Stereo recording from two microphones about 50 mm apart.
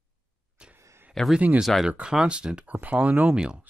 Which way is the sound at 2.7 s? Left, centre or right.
Right.